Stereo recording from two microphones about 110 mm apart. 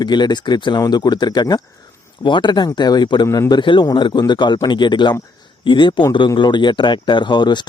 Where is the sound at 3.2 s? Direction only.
25° left (ahead or behind).